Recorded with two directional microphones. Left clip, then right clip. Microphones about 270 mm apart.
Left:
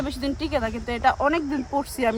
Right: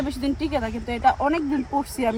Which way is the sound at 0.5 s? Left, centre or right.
Centre.